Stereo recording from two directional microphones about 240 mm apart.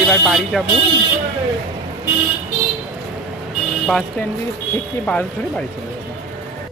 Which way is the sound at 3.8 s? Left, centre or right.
Centre.